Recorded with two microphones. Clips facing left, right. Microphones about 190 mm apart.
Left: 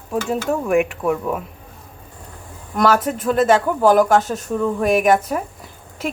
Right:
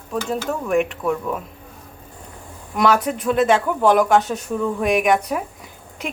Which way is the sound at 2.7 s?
Centre (ahead or behind).